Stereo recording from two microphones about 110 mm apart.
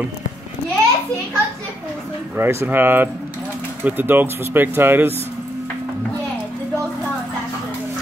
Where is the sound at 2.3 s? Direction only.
20° right (ahead or behind).